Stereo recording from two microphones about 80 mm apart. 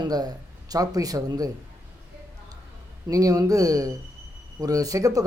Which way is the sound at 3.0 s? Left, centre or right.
Right.